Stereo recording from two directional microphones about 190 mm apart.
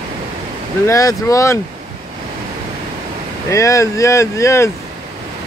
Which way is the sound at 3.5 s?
15° left (ahead or behind).